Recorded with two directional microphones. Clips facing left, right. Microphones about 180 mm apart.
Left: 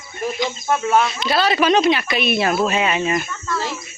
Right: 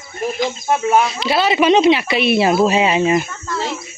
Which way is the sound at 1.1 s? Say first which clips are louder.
Right 2 dB; 30° right (ahead or behind).